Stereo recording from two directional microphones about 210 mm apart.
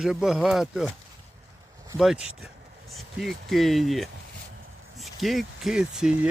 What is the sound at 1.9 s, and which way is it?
Speech, 5° right (ahead or behind).